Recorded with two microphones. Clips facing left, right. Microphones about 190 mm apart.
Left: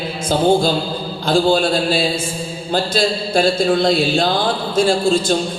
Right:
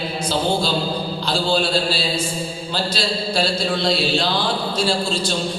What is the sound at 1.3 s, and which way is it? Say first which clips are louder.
Speech: left 7 dB; 50° left (ahead or behind).